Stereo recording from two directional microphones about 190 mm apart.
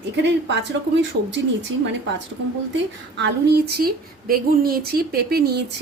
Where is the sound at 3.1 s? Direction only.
65° right (ahead or behind).